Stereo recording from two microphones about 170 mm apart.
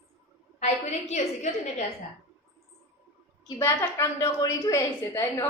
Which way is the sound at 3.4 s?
20° left (ahead or behind).